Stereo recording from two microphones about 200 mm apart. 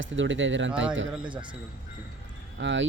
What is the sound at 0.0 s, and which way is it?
Speech, 70° right (ahead or behind).